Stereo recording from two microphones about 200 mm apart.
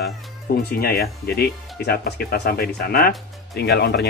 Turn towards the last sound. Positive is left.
turn(degrees=50)  # may be behind; listen again after turning